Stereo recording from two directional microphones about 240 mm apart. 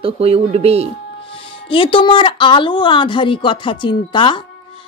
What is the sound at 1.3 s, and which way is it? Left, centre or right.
Speech, left.